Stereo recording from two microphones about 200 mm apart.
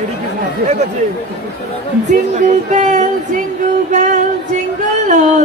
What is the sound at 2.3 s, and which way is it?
Speech, 40° right (ahead or behind).